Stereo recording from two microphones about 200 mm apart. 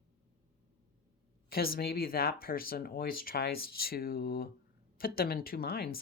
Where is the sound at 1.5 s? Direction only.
50° left (ahead or behind).